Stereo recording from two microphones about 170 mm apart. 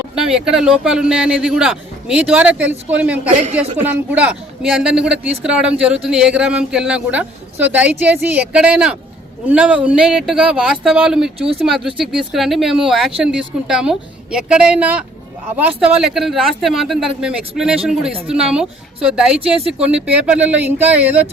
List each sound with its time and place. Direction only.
0.2 s speech: 5° right (ahead or behind)
3.2 s a man's voice: 40° right (ahead or behind)
3.8 s a man's voice: 10° right (ahead or behind)